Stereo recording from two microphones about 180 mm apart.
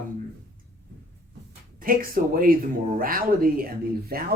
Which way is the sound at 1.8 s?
50° right (ahead or behind).